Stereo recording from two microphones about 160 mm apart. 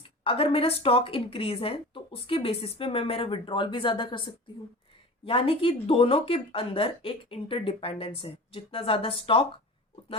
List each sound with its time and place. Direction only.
0.3 s speech: 35° left (ahead or behind)